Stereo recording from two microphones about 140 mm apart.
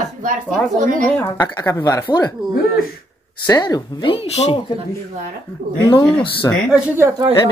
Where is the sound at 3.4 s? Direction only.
30° left (ahead or behind).